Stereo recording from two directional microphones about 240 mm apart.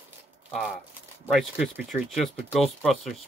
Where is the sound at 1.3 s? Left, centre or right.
Centre.